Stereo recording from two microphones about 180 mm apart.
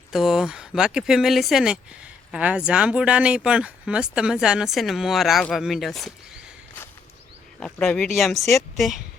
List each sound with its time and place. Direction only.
0.1 s speech: centre (ahead or behind)
7.6 s speech: 5° left (ahead or behind)